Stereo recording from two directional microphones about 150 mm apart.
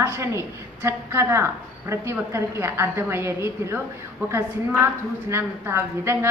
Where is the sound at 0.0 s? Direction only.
15° right (ahead or behind).